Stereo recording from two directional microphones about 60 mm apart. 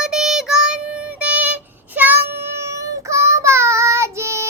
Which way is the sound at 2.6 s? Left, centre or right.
Right.